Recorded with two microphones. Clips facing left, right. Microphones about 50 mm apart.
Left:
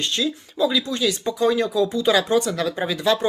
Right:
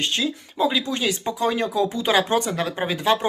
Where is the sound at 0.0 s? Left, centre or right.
Right.